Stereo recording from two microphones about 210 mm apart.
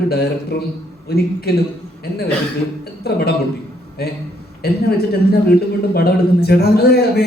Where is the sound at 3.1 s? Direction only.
50° left (ahead or behind).